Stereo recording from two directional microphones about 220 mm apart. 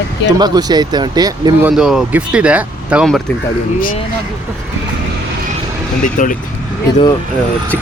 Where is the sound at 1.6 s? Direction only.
Centre (ahead or behind).